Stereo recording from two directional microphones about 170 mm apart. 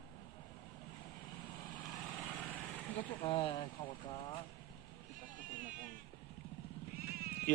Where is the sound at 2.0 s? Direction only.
10° left (ahead or behind).